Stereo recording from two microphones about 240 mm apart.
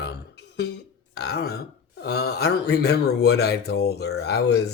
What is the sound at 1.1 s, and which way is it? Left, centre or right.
Speech, left.